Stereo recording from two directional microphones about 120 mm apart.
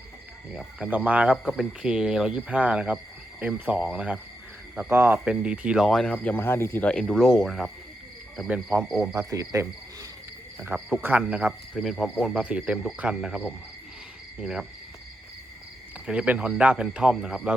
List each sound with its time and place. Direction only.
0.8 s speech: 15° right (ahead or behind)
4.9 s cricket: 20° right (ahead or behind)
5.2 s speech: 10° right (ahead or behind); by 6.8 s 20° left (ahead or behind)
6.8 s speech: 5° left (ahead or behind)
9.0 s cricket: 25° right (ahead or behind)
10.8 s speech: 5° left (ahead or behind)
11.2 s speech: 10° right (ahead or behind)
14.4 s speech: 5° right (ahead or behind)
16.0 s speech: 10° right (ahead or behind)